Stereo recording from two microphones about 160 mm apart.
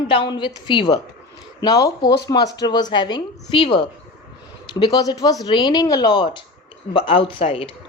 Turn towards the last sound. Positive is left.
turn(degrees=35)  # may be behind; listen again after turning